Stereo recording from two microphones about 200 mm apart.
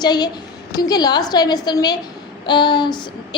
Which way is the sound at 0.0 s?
20° left (ahead or behind).